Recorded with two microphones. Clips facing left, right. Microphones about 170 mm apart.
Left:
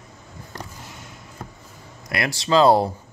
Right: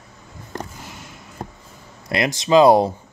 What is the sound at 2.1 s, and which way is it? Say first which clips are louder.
Speech: right 4 dB; 20° right (ahead or behind).